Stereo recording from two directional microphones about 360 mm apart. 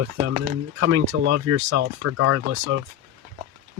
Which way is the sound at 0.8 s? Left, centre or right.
Right.